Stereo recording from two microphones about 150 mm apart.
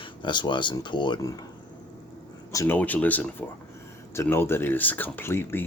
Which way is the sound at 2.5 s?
20° left (ahead or behind).